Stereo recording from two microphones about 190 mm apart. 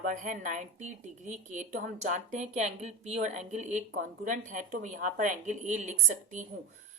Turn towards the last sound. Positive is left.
turn(degrees=-40)  # may be behind; listen again after turning